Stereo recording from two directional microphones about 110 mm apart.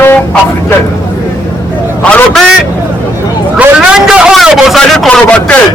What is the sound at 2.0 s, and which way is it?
Vehicle, 10° left (ahead or behind).